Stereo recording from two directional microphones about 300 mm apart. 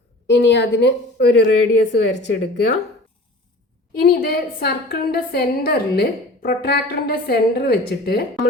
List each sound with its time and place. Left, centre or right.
0.3 s a woman's voice: left
3.9 s a woman's voice: left